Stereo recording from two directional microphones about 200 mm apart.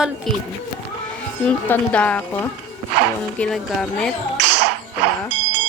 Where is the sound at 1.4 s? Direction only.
5° left (ahead or behind).